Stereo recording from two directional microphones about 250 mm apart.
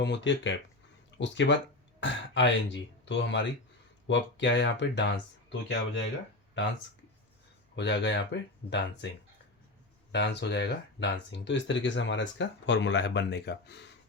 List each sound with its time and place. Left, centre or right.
0.0 s speech: left
7.8 s speech: left
10.1 s speech: left